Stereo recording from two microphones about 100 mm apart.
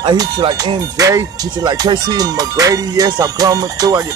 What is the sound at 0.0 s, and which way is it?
Music, 45° right (ahead or behind).